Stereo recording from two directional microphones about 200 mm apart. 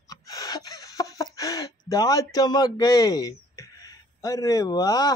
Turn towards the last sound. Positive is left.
turn(degrees=20)  # may be behind; listen again after turning